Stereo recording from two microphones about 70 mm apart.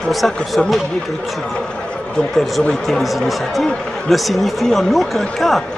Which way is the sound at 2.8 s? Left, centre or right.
Centre.